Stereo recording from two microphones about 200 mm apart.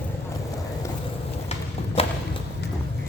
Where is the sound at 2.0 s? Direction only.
30° left (ahead or behind).